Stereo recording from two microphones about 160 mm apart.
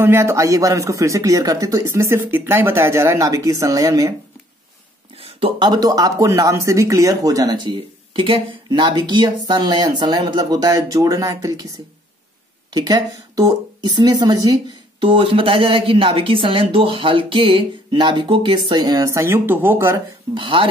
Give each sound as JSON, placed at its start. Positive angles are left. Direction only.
{"t": 0.0, "sound": "speech", "side_deg": -15}
{"t": 5.2, "sound": "speech", "side_deg": -30}
{"t": 12.7, "sound": "a woman's voice", "side_deg": -20}
{"t": 20.3, "sound": "a woman's voice", "side_deg": -30}